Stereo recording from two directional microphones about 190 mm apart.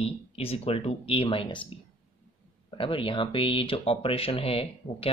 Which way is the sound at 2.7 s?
25° left (ahead or behind).